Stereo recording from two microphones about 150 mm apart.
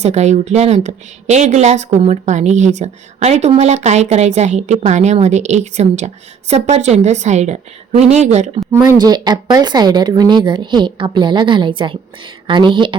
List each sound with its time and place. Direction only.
0.0 s speech: 45° right (ahead or behind)
8.7 s speech: 20° right (ahead or behind)
9.0 s a woman's voice: 30° right (ahead or behind)